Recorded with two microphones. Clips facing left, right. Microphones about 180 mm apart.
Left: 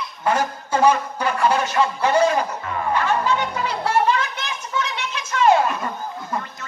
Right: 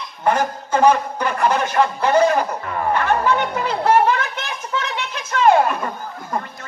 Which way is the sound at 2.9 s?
55° right (ahead or behind).